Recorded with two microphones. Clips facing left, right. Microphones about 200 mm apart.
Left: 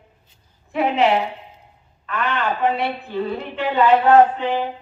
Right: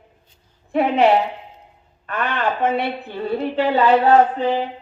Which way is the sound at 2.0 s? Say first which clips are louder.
Right 1 dB; 45° right (ahead or behind).